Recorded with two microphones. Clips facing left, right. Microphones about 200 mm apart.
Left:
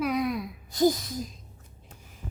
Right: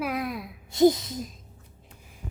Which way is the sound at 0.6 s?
25° right (ahead or behind).